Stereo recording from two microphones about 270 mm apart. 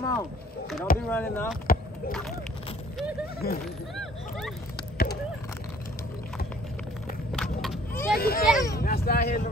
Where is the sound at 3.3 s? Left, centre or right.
Left.